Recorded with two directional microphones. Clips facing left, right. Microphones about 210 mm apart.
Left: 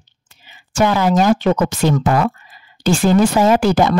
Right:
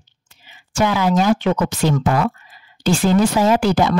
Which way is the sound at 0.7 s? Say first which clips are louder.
Left 2 dB; 45° left (ahead or behind).